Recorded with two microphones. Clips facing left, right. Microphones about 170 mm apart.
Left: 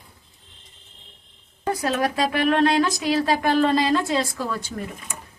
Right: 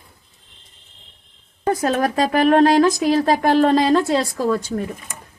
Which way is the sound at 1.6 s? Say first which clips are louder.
Right 4 dB; 45° right (ahead or behind).